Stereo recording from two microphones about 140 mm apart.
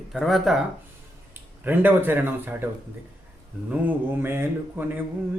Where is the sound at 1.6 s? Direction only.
15° right (ahead or behind).